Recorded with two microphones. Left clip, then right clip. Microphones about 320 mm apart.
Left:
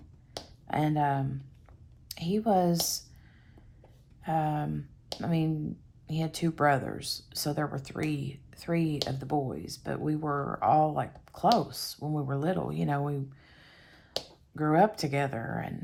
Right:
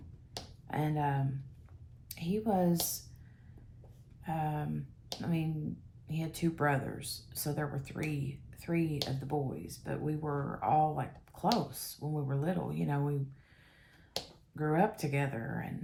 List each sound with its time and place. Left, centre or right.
0.3 s finger snapping: centre
2.0 s speech: centre
4.2 s speech: centre
13.7 s finger snapping: centre